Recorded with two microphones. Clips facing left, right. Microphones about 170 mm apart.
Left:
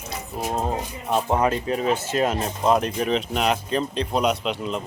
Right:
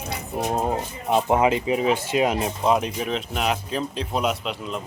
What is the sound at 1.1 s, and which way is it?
Speech, 15° right (ahead or behind).